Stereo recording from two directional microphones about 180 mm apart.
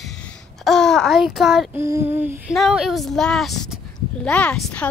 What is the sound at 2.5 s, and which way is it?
A woman's voice, centre (ahead or behind).